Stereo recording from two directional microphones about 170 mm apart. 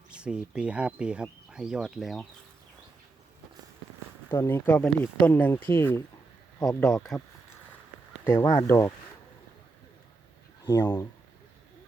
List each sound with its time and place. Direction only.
0.1 s speech: 5° right (ahead or behind)
4.3 s speech: 15° left (ahead or behind)
8.2 s speech: 15° left (ahead or behind)
10.7 s speech: 15° left (ahead or behind)